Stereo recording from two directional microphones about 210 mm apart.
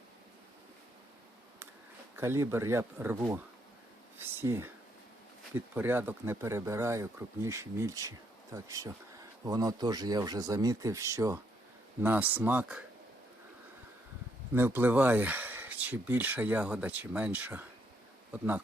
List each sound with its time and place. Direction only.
2.1 s speech: 10° right (ahead or behind)
4.2 s a sound: 10° right (ahead or behind)
5.5 s speech: 10° right (ahead or behind)
14.5 s speech: 10° right (ahead or behind)